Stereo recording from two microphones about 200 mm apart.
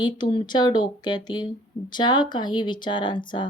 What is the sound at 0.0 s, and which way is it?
Speech, 25° left (ahead or behind).